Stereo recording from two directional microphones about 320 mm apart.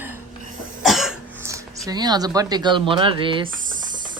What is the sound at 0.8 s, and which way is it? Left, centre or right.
Cough, centre.